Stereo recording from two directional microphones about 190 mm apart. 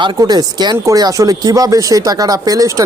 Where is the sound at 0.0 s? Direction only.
20° right (ahead or behind).